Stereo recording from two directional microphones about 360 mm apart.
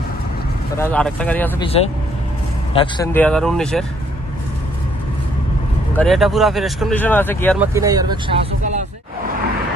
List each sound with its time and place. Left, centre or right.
0.7 s speech: centre
2.7 s speech: centre
5.9 s speech: centre
7.6 s speech: centre